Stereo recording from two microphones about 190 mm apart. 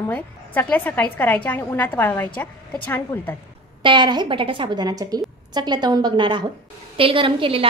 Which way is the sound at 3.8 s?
25° right (ahead or behind).